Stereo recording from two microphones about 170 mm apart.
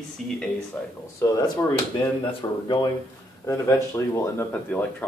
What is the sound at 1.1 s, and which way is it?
Speech, 20° left (ahead or behind).